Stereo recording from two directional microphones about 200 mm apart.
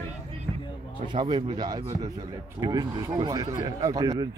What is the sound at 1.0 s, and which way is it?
A man's voice, 25° right (ahead or behind).